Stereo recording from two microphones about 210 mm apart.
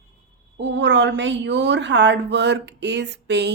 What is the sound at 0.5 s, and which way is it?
A woman's voice, 55° right (ahead or behind).